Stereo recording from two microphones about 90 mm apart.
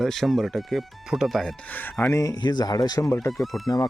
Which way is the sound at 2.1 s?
40° left (ahead or behind).